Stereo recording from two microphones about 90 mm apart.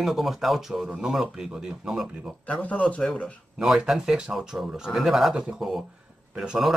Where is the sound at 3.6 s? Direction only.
5° right (ahead or behind).